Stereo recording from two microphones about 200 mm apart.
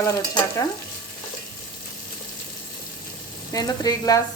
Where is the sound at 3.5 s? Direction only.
20° left (ahead or behind).